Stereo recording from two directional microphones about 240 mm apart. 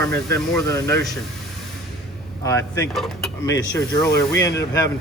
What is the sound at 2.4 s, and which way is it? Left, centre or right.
Speech, centre.